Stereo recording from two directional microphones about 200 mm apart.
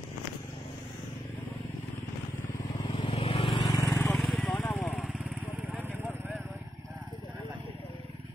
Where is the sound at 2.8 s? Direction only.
25° left (ahead or behind).